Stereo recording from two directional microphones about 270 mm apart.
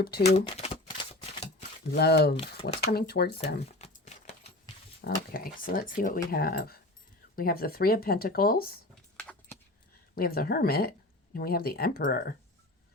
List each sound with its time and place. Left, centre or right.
0.0 s speech: left
0.3 s typewriter: left
1.9 s speech: left
2.3 s speech: left
2.9 s speech: left
3.3 s a sound: left
5.0 s speech: left
9.1 s keys jangling: centre
10.2 s speech: left